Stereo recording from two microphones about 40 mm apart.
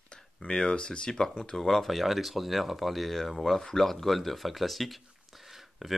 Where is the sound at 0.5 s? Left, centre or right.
Centre.